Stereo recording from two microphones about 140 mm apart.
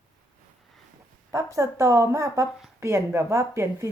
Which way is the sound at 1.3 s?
25° right (ahead or behind).